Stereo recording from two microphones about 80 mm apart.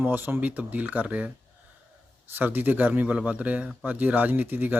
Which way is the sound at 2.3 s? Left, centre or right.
Right.